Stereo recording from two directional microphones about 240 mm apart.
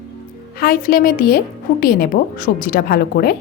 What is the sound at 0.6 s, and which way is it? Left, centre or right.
A woman's voice, left.